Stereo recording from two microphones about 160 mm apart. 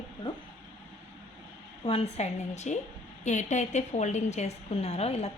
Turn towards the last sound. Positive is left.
turn(degrees=40)  # may be behind; listen again after turning